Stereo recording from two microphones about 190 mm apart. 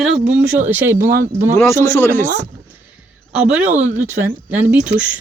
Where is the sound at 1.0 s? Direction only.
45° right (ahead or behind).